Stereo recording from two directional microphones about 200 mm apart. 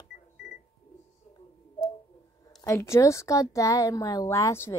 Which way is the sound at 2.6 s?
15° left (ahead or behind).